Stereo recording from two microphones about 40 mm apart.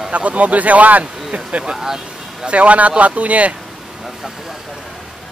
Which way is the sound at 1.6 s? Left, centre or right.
Centre.